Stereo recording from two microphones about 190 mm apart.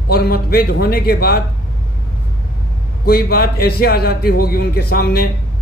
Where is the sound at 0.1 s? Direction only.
55° left (ahead or behind).